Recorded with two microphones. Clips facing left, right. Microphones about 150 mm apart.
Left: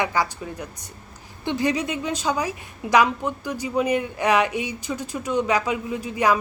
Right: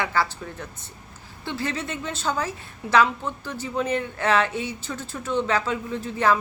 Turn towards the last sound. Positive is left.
turn(degrees=10)  # may be behind; listen again after turning